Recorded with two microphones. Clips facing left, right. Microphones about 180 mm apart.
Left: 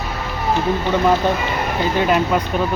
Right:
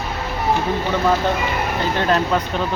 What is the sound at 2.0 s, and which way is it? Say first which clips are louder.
Speech: left 2 dB; 10° left (ahead or behind).